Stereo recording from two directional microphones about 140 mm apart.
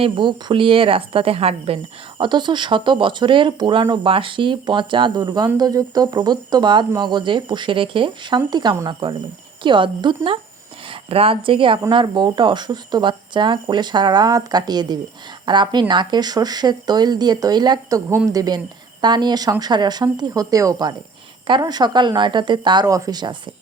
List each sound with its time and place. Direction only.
0.0 s speech: 35° right (ahead or behind)